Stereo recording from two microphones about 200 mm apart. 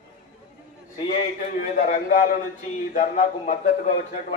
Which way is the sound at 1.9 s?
40° left (ahead or behind).